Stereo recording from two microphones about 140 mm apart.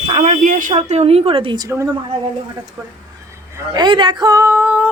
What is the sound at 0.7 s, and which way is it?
Speech, 50° right (ahead or behind).